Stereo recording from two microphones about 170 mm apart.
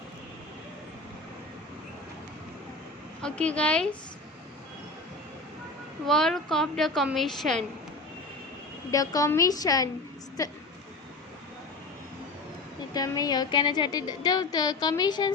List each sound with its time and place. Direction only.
3.2 s a woman's voice: 5° left (ahead or behind)
6.1 s a woman's voice: 5° left (ahead or behind)
8.9 s a woman's voice: 20° left (ahead or behind)
12.9 s a woman's voice: 20° left (ahead or behind)